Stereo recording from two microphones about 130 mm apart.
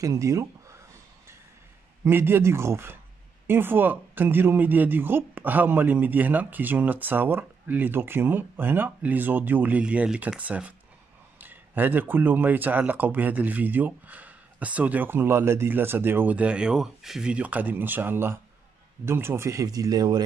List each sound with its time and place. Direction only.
0.0 s speech: 25° right (ahead or behind)
2.0 s speech: 15° right (ahead or behind)